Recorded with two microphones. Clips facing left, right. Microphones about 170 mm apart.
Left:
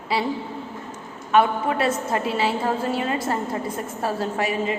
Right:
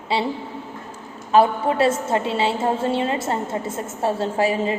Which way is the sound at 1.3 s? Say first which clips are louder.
Right 2 dB; 30° right (ahead or behind).